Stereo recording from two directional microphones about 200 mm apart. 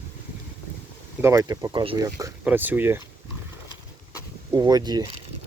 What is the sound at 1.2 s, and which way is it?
Speech, 15° right (ahead or behind).